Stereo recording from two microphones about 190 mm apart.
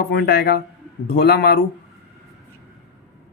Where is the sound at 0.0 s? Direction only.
60° left (ahead or behind).